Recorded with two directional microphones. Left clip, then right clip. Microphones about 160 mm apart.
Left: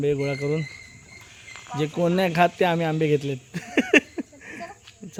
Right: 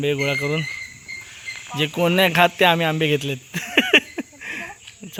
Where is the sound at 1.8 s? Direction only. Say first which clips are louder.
Right 5 dB; centre (ahead or behind).